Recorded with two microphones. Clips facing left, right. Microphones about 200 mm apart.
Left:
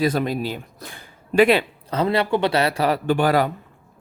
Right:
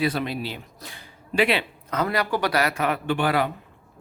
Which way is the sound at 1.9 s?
30° left (ahead or behind).